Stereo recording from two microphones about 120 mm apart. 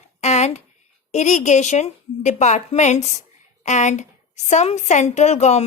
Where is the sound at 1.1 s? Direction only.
75° left (ahead or behind).